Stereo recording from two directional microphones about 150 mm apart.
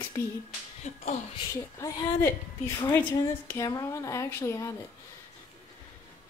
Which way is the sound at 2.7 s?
15° left (ahead or behind).